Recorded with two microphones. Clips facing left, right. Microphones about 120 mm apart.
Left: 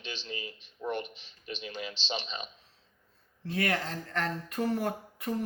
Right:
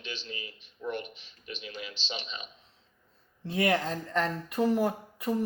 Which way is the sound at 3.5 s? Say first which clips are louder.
Right 4 dB; 20° right (ahead or behind).